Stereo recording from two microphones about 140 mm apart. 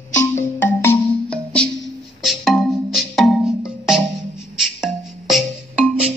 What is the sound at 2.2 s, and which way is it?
Music, centre (ahead or behind).